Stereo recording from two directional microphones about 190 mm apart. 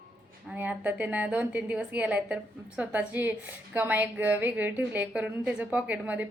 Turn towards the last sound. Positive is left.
turn(degrees=-10)  # may be behind; listen again after turning